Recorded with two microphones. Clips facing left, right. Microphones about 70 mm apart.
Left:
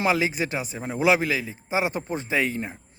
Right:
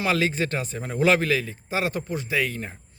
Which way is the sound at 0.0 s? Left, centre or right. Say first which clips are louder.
Even; centre.